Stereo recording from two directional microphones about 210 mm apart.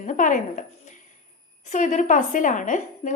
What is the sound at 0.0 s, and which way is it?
Speech, 35° left (ahead or behind).